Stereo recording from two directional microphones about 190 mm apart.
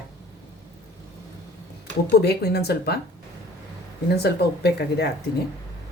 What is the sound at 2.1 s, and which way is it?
Speech, 55° left (ahead or behind).